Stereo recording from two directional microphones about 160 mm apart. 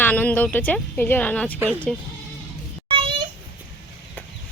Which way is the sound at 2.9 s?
30° right (ahead or behind).